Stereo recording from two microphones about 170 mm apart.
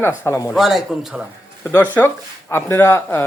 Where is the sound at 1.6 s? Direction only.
10° left (ahead or behind).